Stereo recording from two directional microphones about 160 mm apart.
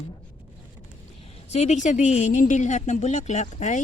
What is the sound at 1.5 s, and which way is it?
A woman's voice, 45° left (ahead or behind).